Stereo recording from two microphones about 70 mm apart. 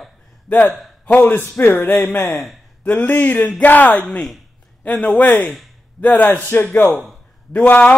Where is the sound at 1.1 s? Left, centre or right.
Left.